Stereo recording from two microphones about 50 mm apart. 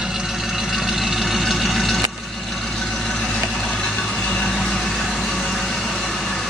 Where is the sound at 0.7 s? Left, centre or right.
Centre.